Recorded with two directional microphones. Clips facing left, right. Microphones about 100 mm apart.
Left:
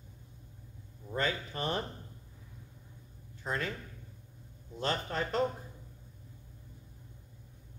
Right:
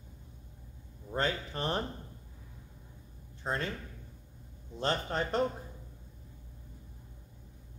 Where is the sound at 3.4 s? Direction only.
30° right (ahead or behind).